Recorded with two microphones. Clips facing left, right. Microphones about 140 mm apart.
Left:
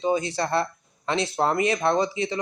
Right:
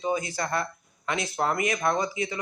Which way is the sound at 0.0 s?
30° left (ahead or behind).